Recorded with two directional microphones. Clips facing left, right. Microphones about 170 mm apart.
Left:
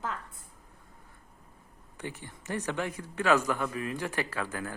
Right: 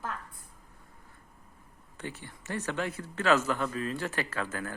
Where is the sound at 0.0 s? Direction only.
20° left (ahead or behind).